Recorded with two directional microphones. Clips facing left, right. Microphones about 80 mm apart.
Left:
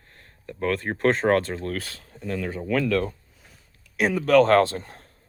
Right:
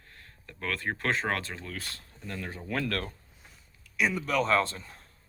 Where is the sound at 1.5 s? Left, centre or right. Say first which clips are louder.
Left 10 dB; left.